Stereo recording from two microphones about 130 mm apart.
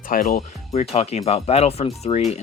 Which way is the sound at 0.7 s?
55° left (ahead or behind).